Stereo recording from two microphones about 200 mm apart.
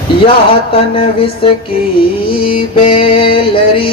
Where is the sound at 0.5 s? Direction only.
25° left (ahead or behind).